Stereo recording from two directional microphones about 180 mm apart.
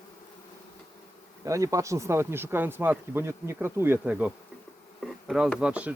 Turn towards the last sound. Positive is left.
turn(degrees=-5)  # may be behind; listen again after turning